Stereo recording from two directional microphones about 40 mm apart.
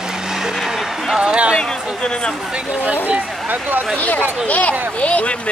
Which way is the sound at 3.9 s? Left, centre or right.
Left.